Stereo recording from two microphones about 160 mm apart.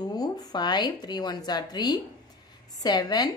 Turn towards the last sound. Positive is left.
turn(degrees=25)  # may be behind; listen again after turning